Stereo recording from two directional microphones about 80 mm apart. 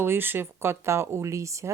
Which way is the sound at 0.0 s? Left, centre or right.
Right.